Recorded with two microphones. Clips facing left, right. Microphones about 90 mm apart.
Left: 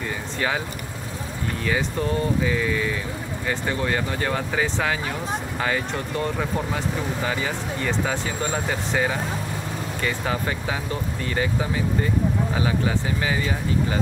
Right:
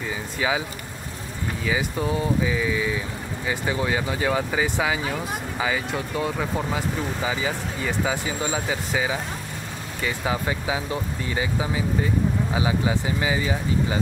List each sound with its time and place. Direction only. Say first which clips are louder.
1.7 s speech: even; 5° right (ahead or behind)
12.5 s speech: even; 10° right (ahead or behind)